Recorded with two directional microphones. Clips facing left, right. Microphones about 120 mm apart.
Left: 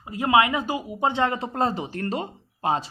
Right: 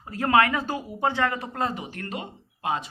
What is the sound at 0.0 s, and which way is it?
Speech, 15° left (ahead or behind).